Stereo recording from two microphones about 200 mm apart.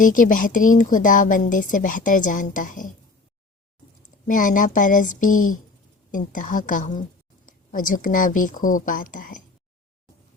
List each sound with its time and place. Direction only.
0.0 s a woman's voice: 40° left (ahead or behind)
4.3 s a woman's voice: 40° left (ahead or behind)